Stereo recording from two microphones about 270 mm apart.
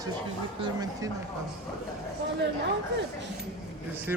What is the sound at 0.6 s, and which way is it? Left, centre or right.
Speech, centre.